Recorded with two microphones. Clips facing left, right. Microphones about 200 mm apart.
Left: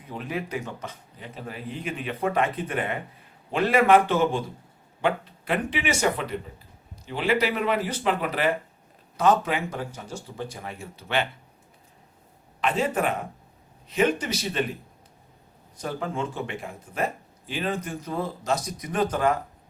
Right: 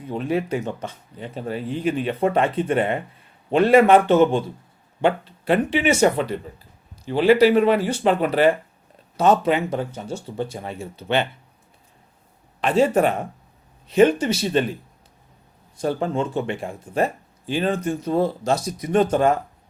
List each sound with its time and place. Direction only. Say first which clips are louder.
0.1 s speech: right 8 dB; 30° right (ahead or behind)
12.5 s speech: right 7 dB; 30° right (ahead or behind)
15.8 s speech: right 7 dB; 30° right (ahead or behind)